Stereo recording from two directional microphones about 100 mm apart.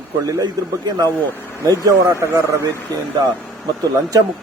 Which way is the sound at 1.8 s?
30° right (ahead or behind).